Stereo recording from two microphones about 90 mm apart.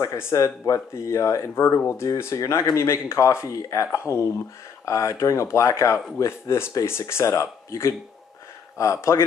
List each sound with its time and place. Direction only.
0.0 s speech: 35° left (ahead or behind)